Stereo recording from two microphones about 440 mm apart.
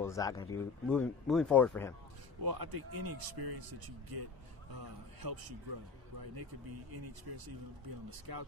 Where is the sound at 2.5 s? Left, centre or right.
Right.